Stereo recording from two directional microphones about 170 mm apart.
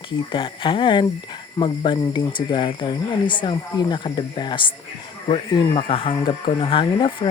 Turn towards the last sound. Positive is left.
turn(degrees=30)  # may be behind; listen again after turning